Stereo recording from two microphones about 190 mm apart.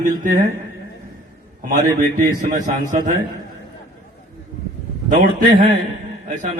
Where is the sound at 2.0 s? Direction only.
45° right (ahead or behind).